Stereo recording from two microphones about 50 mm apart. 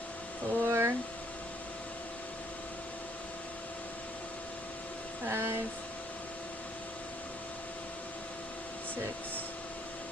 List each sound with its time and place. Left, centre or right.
0.6 s speech: right
5.2 s speech: right